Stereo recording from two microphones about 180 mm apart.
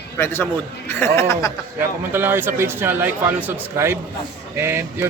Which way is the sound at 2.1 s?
10° right (ahead or behind).